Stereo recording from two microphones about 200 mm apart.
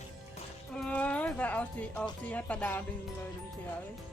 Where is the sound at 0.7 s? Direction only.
5° left (ahead or behind).